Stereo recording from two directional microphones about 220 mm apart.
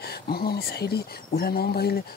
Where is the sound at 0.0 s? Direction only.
45° left (ahead or behind).